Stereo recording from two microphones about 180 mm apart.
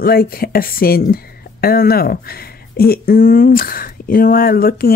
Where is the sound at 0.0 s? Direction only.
55° left (ahead or behind).